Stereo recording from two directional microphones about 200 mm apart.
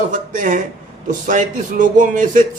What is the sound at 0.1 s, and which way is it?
A man's voice, 40° right (ahead or behind).